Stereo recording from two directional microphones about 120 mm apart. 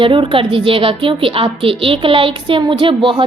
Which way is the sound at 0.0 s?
45° right (ahead or behind).